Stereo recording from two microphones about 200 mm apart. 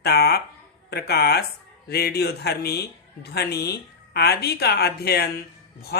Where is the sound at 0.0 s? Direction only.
55° left (ahead or behind).